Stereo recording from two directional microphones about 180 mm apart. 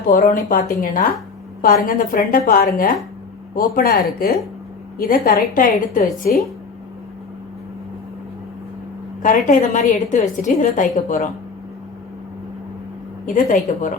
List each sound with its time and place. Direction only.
0.1 s a woman's voice: 50° left (ahead or behind)
9.2 s a woman's voice: 45° left (ahead or behind)
13.2 s a woman's voice: 50° left (ahead or behind)